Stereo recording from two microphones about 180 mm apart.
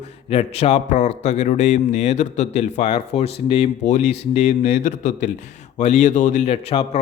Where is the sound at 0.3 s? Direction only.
35° left (ahead or behind).